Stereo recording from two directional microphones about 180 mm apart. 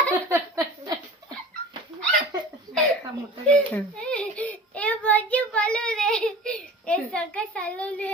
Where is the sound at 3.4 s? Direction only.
5° left (ahead or behind).